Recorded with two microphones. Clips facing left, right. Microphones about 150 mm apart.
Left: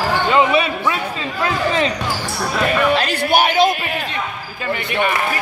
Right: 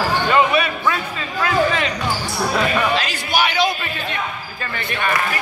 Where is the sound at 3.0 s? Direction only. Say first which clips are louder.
Left 4 dB; 55° left (ahead or behind).